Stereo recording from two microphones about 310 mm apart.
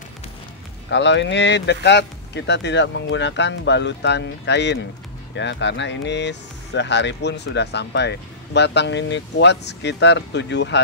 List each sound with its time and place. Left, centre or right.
0.8 s speech: left